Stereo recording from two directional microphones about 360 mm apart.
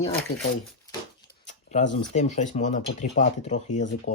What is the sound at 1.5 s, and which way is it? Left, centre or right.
Speech, centre.